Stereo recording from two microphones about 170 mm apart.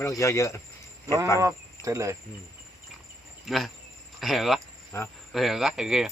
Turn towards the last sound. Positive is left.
turn(degrees=-5)  # may be behind; listen again after turning